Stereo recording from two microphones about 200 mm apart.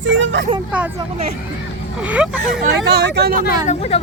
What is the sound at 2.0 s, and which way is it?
Speech, 5° right (ahead or behind).